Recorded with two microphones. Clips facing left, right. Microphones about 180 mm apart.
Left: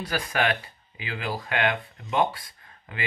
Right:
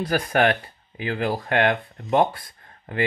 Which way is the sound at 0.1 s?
55° right (ahead or behind).